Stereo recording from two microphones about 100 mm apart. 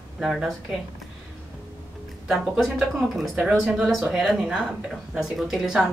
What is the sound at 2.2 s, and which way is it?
A woman's voice, 5° right (ahead or behind).